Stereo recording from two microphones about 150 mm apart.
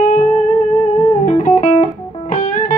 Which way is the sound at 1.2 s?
55° left (ahead or behind).